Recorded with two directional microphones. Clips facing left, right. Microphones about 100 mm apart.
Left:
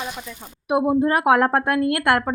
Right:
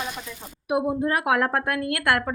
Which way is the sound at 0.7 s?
25° left (ahead or behind).